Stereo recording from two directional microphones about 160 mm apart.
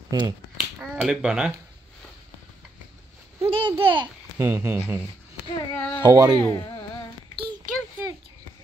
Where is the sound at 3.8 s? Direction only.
30° right (ahead or behind).